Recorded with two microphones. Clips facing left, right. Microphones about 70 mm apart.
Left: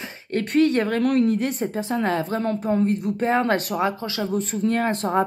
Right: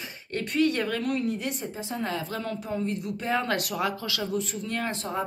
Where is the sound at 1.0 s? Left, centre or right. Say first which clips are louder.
Left 8 dB; left.